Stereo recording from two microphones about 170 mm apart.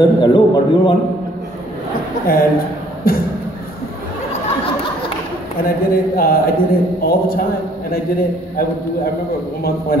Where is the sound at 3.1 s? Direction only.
60° left (ahead or behind).